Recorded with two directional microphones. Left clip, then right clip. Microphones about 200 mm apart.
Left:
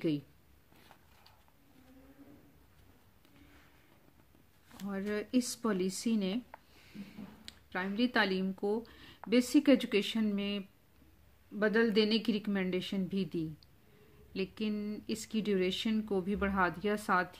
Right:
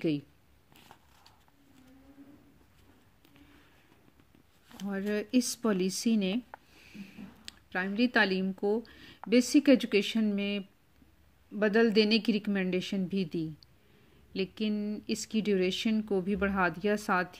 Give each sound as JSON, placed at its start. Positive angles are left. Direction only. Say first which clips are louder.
{"t": 4.6, "sound": "speech", "louder": "right 4 dB", "side_deg": -25}
{"t": 11.6, "sound": "a woman's voice", "louder": "right 4 dB", "side_deg": -20}